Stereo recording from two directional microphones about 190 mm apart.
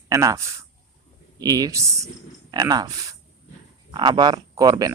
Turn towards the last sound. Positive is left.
turn(degrees=-20)  # may be behind; listen again after turning